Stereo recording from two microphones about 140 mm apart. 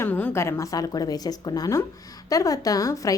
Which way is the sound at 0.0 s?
10° left (ahead or behind).